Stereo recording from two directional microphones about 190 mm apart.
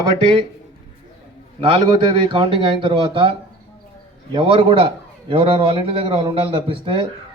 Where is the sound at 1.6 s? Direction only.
25° right (ahead or behind).